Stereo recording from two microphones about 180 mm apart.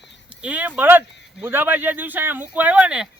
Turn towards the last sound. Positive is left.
turn(degrees=-5)  # may be behind; listen again after turning